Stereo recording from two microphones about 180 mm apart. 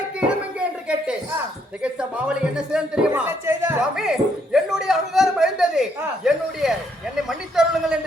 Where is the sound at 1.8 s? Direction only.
5° right (ahead or behind).